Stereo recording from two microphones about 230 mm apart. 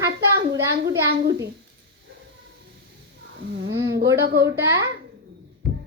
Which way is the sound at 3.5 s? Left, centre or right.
Right.